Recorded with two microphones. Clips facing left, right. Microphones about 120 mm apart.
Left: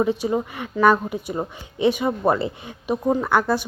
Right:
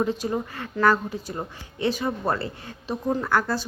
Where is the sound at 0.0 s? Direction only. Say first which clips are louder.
Left 4 dB; 10° left (ahead or behind).